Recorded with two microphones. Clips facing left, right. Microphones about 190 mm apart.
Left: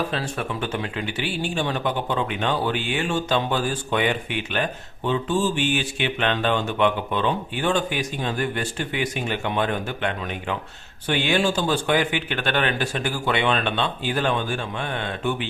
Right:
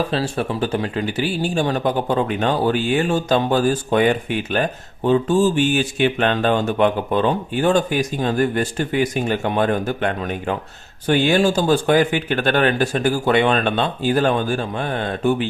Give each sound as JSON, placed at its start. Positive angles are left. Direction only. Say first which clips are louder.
{"t": 0.1, "sound": "speech", "louder": "right 6 dB", "side_deg": -35}